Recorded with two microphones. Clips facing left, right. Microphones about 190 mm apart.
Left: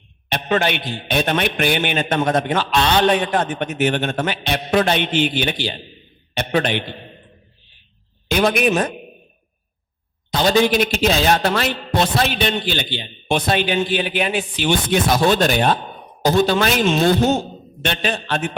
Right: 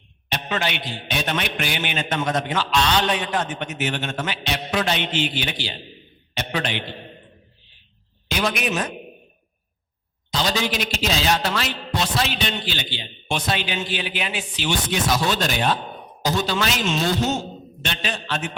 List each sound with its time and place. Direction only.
0.3 s a man's voice: 55° left (ahead or behind)
8.3 s a man's voice: 55° left (ahead or behind)
10.3 s a man's voice: 55° left (ahead or behind)